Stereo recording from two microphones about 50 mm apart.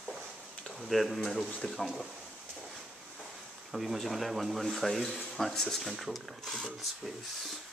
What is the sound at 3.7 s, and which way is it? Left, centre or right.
Speech, centre.